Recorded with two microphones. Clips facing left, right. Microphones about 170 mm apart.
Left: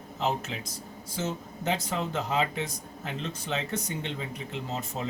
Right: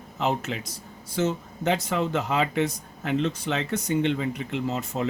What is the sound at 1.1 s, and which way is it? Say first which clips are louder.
Speech: right 7 dB; 70° right (ahead or behind).